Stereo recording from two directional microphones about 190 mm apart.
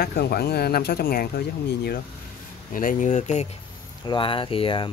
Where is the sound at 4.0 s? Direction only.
25° left (ahead or behind).